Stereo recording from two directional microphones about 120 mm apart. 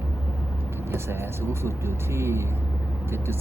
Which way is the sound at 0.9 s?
20° right (ahead or behind).